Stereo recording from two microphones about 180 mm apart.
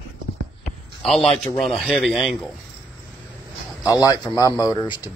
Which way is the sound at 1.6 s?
Centre (ahead or behind).